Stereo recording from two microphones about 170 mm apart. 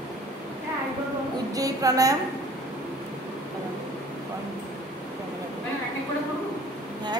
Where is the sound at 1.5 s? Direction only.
20° right (ahead or behind).